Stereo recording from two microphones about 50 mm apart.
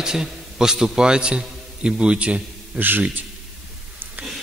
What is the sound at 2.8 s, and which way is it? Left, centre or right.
Speech, right.